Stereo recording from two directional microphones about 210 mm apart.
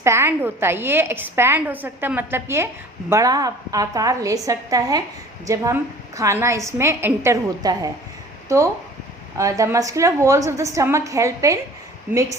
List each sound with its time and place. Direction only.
0.0 s a woman's voice: 10° right (ahead or behind)